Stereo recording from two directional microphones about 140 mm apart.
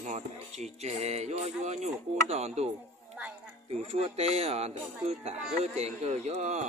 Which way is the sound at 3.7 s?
50° right (ahead or behind).